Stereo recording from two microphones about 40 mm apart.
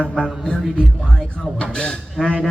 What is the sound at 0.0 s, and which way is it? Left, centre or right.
Music, left.